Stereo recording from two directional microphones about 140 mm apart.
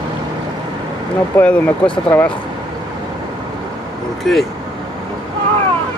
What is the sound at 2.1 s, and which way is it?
Speech, 15° left (ahead or behind).